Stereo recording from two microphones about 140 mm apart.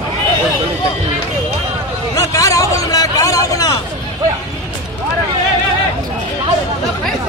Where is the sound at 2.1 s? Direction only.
25° left (ahead or behind).